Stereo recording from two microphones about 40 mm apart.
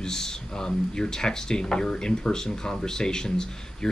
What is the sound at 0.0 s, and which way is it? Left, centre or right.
Speech, centre.